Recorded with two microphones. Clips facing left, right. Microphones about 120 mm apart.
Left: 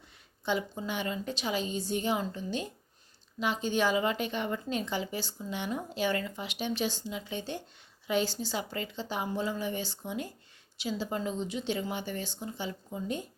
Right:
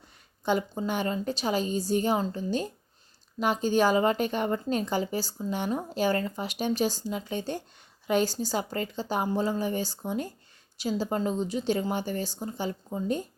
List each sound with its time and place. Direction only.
0.4 s a woman's voice: 45° right (ahead or behind)